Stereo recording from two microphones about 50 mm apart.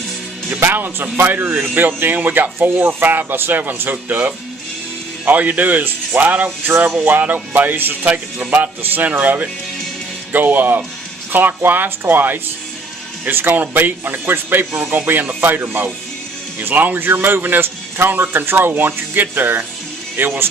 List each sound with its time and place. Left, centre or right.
0.6 s a man's voice: right